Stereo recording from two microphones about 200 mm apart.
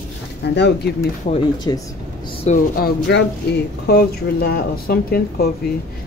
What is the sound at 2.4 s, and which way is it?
Speech, 45° left (ahead or behind).